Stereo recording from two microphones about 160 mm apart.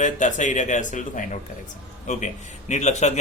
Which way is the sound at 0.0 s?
50° left (ahead or behind).